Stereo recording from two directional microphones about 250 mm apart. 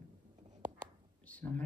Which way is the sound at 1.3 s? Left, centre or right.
Centre.